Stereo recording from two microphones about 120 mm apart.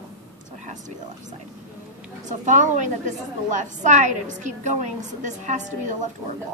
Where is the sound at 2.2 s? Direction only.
90° right.